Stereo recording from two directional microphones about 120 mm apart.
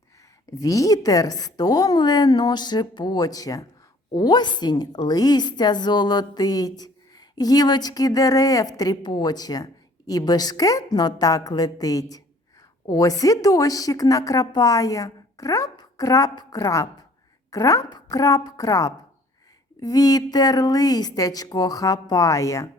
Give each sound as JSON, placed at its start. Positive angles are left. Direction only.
{"t": 0.6, "sound": "a woman's voice", "side_deg": 30}